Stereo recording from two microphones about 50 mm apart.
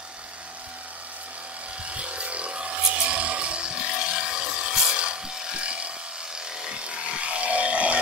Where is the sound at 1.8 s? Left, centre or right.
Right.